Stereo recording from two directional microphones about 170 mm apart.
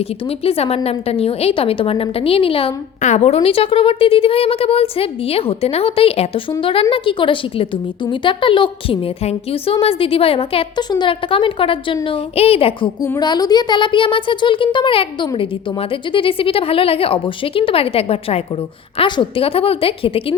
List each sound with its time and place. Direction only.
0.3 s a woman's voice: 35° left (ahead or behind)
13.0 s a woman's voice: 20° left (ahead or behind)